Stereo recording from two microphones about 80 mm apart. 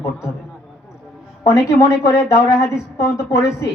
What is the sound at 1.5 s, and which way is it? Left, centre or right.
A woman's voice, left.